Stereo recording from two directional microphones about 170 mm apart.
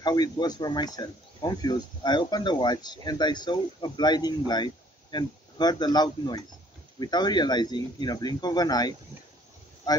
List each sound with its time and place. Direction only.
0.0 s speech: 25° left (ahead or behind)